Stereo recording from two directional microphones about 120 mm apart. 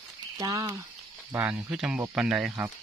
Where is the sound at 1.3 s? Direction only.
15° right (ahead or behind).